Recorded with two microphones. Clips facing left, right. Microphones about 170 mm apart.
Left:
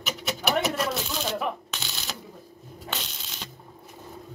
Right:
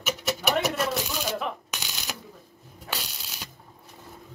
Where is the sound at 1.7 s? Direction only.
15° right (ahead or behind).